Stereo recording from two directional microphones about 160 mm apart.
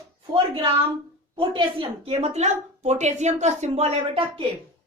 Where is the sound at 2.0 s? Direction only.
40° right (ahead or behind).